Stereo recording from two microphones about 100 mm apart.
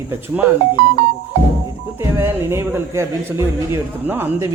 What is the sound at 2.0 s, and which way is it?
Speech, 25° right (ahead or behind).